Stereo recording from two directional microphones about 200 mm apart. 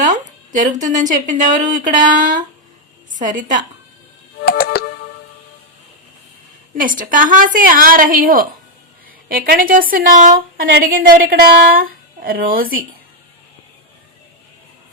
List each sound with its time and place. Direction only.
0.0 s speech: 40° right (ahead or behind)
4.4 s music: 50° left (ahead or behind)
6.7 s a woman's voice: 40° right (ahead or behind)